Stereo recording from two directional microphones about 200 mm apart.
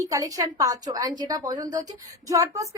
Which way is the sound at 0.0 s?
15° right (ahead or behind).